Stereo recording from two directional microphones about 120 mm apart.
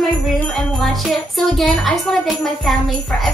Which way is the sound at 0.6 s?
5° left (ahead or behind).